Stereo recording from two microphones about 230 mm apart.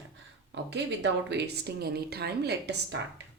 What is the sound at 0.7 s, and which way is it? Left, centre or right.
A woman's voice, right.